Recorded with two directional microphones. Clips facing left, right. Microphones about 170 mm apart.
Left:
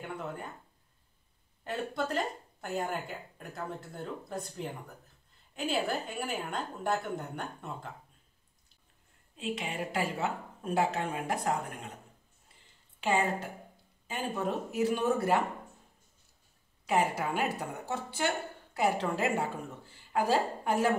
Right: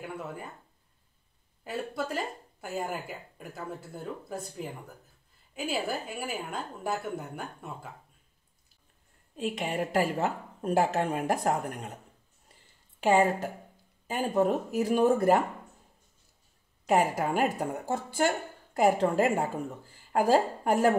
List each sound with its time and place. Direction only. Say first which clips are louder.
0.0 s speech: right 1 dB; 5° right (ahead or behind)
1.6 s speech: even; 5° right (ahead or behind)
9.6 s speech: right 7 dB; 45° right (ahead or behind)
13.0 s speech: right 6 dB; 45° right (ahead or behind)
16.8 s a woman's voice: right 4 dB; 45° right (ahead or behind)